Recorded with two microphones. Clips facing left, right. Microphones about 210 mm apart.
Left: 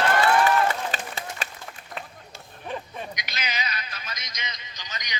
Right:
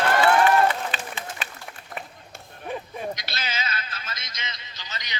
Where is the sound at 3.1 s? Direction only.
15° left (ahead or behind).